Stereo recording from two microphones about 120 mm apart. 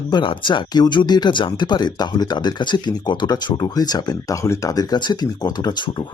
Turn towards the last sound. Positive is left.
turn(degrees=35)  # may be behind; listen again after turning